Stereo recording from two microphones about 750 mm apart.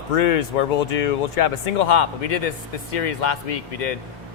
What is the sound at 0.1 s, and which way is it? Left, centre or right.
Speech, left.